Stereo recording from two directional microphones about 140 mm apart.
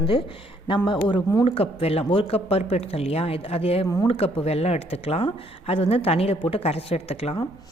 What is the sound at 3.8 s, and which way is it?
Speech, 25° left (ahead or behind).